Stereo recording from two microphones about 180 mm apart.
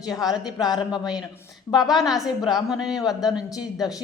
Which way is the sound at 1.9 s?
Centre (ahead or behind).